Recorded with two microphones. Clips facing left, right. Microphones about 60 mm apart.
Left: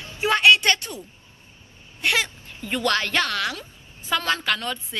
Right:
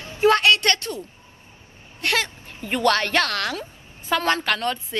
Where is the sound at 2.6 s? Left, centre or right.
Right.